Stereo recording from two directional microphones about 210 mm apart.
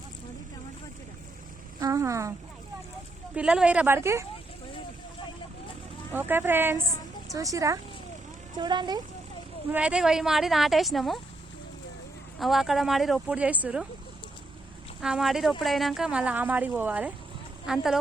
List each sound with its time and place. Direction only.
1.8 s speech: 15° right (ahead or behind)
3.3 s a woman's voice: 5° right (ahead or behind)
6.1 s speech: 10° right (ahead or behind)
9.7 s a woman's voice: 5° right (ahead or behind)
12.4 s a woman's voice: centre (ahead or behind)
15.0 s a woman's voice: centre (ahead or behind)